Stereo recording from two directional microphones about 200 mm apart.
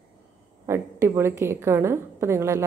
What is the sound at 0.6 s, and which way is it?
A woman's voice, 15° right (ahead or behind).